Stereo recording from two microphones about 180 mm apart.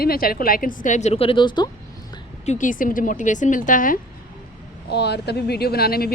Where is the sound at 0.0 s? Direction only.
55° left (ahead or behind); by 1.6 s 25° left (ahead or behind).